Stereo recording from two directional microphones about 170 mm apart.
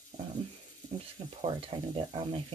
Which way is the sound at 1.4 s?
35° right (ahead or behind).